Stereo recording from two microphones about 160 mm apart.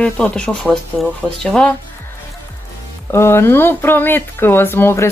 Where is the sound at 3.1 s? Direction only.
15° left (ahead or behind).